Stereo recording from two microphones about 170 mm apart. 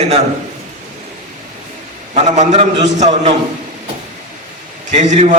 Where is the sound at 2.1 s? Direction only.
45° right (ahead or behind).